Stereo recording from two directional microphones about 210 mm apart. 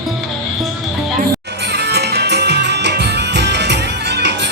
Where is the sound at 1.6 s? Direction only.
50° right (ahead or behind).